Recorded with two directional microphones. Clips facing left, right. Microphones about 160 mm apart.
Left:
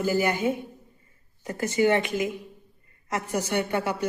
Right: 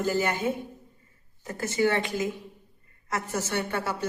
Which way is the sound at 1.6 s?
15° left (ahead or behind).